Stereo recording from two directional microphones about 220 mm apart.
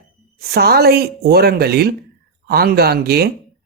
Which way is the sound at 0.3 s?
45° right (ahead or behind).